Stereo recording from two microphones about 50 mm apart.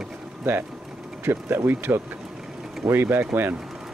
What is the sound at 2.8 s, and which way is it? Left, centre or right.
Speech, right.